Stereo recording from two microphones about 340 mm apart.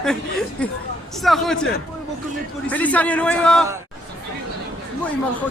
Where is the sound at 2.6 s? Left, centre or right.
Centre.